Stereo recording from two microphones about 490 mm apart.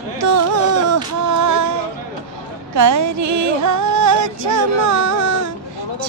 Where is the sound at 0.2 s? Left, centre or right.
Right.